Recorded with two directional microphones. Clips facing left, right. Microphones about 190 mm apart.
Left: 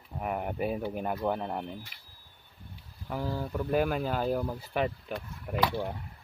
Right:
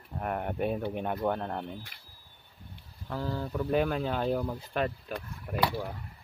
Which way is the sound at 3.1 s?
10° left (ahead or behind).